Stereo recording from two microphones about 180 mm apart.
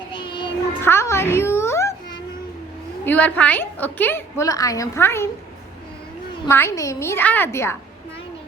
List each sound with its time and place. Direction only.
0.1 s child singing: 25° left (ahead or behind)
0.8 s music: 15° left (ahead or behind)
3.0 s a woman's voice: 10° left (ahead or behind)
6.5 s a woman's voice: 15° left (ahead or behind)